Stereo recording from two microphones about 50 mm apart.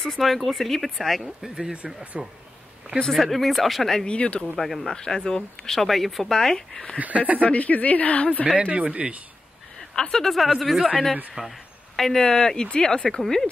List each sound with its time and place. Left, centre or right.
0.0 s speech: centre
1.4 s speech: centre
3.1 s speech: centre
4.0 s speech: left
4.6 s speech: centre
4.9 s speech: centre
7.0 s speech: right
7.4 s speech: left
8.6 s speech: right
9.9 s speech: centre
11.4 s speech: centre
12.0 s speech: centre